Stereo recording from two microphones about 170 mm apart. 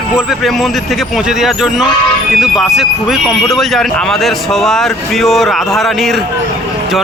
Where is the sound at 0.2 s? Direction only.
Centre (ahead or behind).